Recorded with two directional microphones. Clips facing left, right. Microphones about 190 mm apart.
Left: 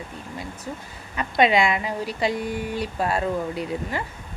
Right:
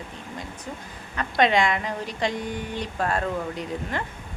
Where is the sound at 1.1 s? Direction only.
10° left (ahead or behind).